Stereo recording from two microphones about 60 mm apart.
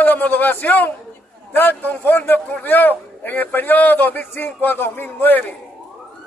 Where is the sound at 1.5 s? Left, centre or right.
Left.